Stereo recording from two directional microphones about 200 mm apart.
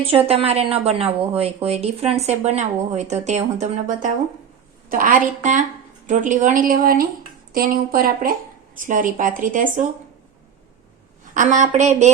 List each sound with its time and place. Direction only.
0.3 s a woman's voice: 30° right (ahead or behind)
11.3 s speech: 35° right (ahead or behind)